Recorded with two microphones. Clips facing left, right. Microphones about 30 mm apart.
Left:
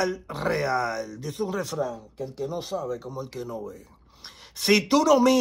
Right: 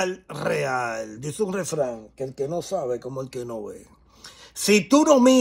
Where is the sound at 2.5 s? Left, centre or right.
Left.